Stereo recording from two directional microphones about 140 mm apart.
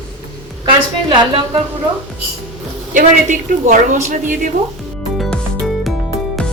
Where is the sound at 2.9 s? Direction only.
65° right (ahead or behind).